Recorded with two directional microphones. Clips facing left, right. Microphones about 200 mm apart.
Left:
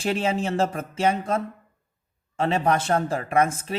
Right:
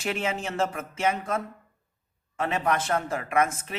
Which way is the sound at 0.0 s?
30° left (ahead or behind).